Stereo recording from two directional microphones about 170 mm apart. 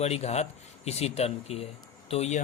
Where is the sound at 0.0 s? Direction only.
40° left (ahead or behind).